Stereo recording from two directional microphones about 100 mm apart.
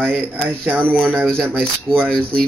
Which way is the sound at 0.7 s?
20° right (ahead or behind).